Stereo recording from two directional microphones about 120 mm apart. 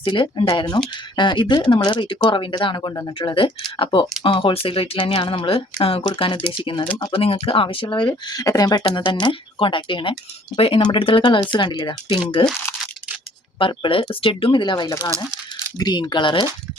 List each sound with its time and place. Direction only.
0.0 s speech: 40° left (ahead or behind)
3.2 s speech: 45° left (ahead or behind)
13.6 s speech: 45° left (ahead or behind)